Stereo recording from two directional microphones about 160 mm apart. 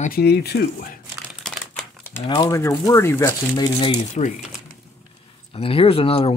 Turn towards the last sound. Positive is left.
turn(degrees=35)  # may be behind; listen again after turning